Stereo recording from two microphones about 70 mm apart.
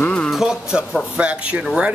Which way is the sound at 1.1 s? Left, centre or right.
Centre.